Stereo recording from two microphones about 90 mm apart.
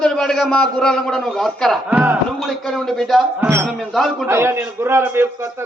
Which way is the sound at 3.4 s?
30° right (ahead or behind).